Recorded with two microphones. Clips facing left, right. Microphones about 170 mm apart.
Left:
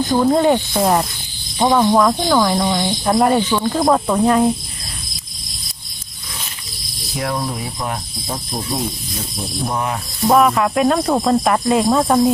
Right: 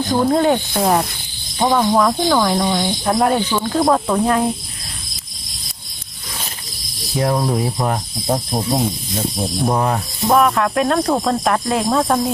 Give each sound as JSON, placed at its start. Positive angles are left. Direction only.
{"t": 0.1, "sound": "speech", "side_deg": 0}
{"t": 7.2, "sound": "cricket", "side_deg": -30}
{"t": 9.1, "sound": "speech", "side_deg": -25}
{"t": 10.2, "sound": "speech", "side_deg": 0}